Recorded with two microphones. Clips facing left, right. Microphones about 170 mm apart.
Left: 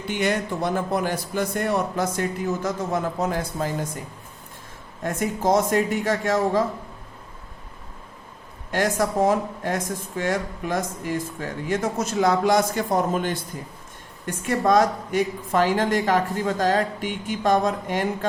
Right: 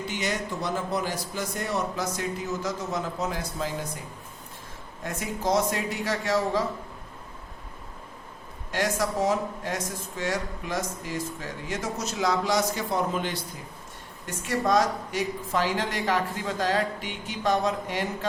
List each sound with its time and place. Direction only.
0.1 s a man's voice: 55° left (ahead or behind)
5.0 s speech: 50° left (ahead or behind)
8.7 s speech: 50° left (ahead or behind)
14.4 s speech: 50° left (ahead or behind)